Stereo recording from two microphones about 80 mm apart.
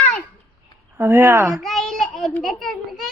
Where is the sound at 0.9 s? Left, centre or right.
Right.